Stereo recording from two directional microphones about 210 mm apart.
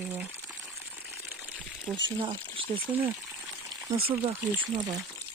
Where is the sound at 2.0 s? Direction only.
20° right (ahead or behind).